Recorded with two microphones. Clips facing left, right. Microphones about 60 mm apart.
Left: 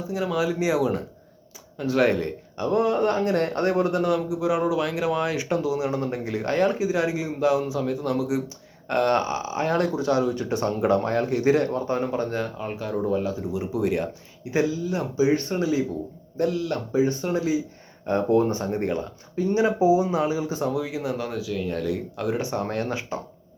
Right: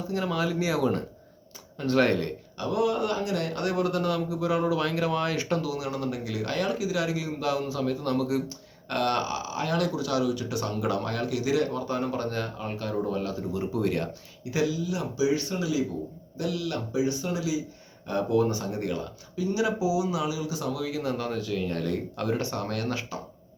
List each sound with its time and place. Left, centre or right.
0.1 s a man's voice: centre
2.6 s a man's voice: left; by 14.1 s centre
14.5 s speech: left; by 22.4 s centre
22.4 s speech: left